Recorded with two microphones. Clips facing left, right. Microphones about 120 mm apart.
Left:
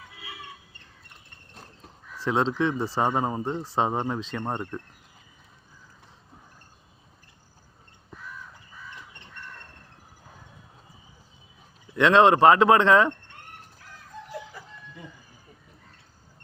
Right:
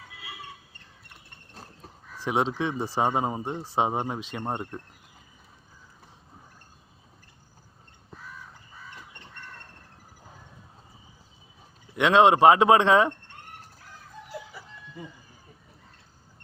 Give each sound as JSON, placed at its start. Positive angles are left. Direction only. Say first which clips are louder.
{"t": 2.2, "sound": "a man's voice", "louder": "left 2 dB", "side_deg": -15}
{"t": 11.9, "sound": "speech", "louder": "left 1 dB", "side_deg": -20}
{"t": 14.3, "sound": "chicken", "louder": "left 1 dB", "side_deg": -5}